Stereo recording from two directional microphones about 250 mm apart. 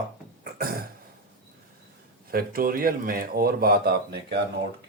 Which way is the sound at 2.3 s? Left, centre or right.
Right.